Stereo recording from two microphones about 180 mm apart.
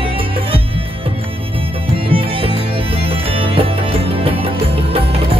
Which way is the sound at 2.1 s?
30° right (ahead or behind).